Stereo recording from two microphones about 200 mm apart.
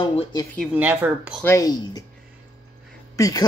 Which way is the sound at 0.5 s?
5° right (ahead or behind).